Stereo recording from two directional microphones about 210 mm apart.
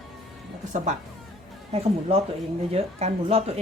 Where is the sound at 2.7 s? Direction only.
30° right (ahead or behind).